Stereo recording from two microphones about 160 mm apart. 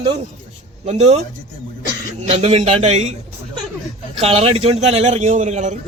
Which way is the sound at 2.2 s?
40° right (ahead or behind).